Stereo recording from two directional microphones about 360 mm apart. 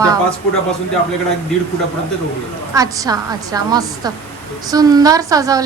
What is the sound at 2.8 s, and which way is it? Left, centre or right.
A woman's voice, centre.